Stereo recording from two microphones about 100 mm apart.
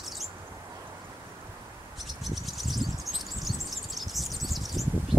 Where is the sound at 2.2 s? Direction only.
Centre (ahead or behind).